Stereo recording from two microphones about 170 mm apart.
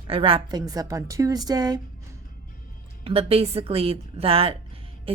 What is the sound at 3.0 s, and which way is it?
Speech, 35° right (ahead or behind).